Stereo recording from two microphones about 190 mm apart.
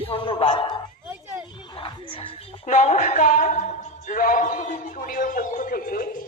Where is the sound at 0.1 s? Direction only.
30° left (ahead or behind).